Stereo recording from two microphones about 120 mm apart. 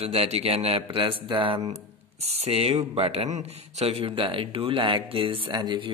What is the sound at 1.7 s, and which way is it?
Speech, 65° right (ahead or behind).